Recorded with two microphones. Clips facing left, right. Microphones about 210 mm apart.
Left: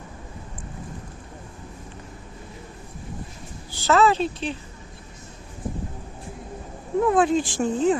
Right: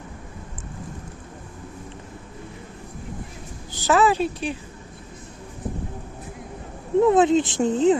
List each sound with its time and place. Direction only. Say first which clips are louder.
3.8 s speech: even; 15° right (ahead or behind)
7.0 s speech: right 3 dB; 25° right (ahead or behind)